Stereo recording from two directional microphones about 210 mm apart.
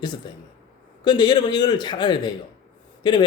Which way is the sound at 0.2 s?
20° left (ahead or behind).